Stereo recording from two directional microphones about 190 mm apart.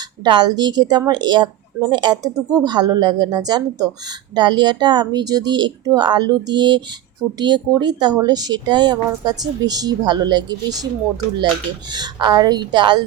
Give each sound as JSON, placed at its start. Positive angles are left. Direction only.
{"t": 0.3, "sound": "speech", "side_deg": -20}
{"t": 11.9, "sound": "speech", "side_deg": -20}